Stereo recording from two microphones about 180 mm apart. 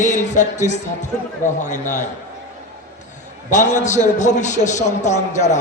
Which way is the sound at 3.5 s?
45° left (ahead or behind).